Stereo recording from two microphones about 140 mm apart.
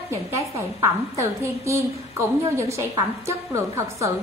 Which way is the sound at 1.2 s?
20° right (ahead or behind).